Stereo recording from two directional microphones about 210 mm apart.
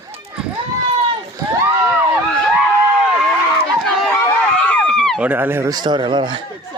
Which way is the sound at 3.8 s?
Centre (ahead or behind).